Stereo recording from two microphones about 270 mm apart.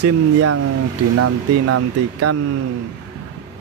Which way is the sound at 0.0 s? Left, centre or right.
Right.